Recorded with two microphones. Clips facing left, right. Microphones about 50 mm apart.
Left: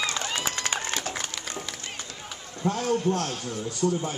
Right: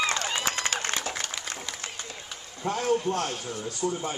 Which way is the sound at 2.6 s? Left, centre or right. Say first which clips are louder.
Left 1 dB; centre.